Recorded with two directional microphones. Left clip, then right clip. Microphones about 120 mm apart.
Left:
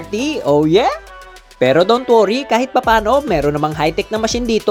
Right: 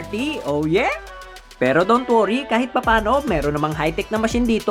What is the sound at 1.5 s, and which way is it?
Speech, 20° left (ahead or behind).